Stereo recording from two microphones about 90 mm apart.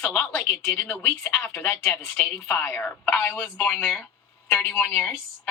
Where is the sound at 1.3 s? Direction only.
25° left (ahead or behind).